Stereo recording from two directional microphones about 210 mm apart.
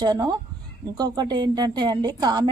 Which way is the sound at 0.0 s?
20° right (ahead or behind).